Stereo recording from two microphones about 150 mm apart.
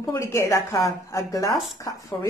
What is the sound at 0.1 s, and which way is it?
Speech, 20° left (ahead or behind).